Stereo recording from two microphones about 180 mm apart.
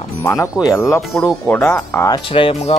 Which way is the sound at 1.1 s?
Centre (ahead or behind).